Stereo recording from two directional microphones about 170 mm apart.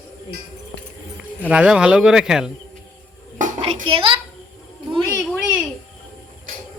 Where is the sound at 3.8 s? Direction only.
30° right (ahead or behind).